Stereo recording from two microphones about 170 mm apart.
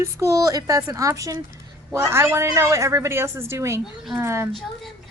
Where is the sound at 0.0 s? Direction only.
20° right (ahead or behind).